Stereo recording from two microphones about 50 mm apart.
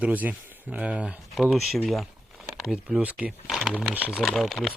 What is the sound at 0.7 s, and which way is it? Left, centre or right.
Speech, right.